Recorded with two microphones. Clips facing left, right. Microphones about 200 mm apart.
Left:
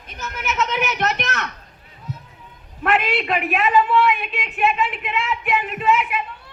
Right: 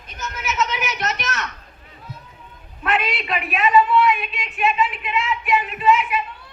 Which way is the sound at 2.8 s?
60° left (ahead or behind).